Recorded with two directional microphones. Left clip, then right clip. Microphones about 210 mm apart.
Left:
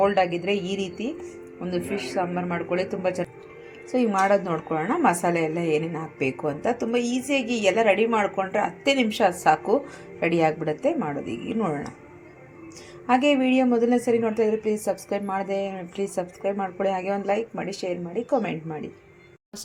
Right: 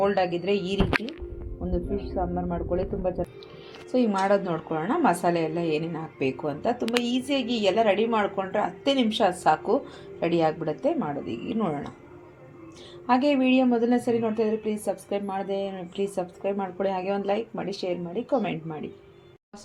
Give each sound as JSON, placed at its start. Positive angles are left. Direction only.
{"t": 0.0, "sound": "speech", "side_deg": 5}
{"t": 1.7, "sound": "a man's voice", "side_deg": 30}
{"t": 2.7, "sound": "a woman's voice", "side_deg": 10}
{"t": 13.1, "sound": "a woman's voice", "side_deg": 10}